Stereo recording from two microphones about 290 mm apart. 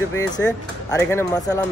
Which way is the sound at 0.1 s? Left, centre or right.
Centre.